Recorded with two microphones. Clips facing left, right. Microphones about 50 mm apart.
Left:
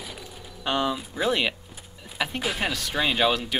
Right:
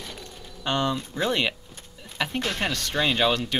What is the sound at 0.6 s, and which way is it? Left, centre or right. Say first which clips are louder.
Speech: even; centre.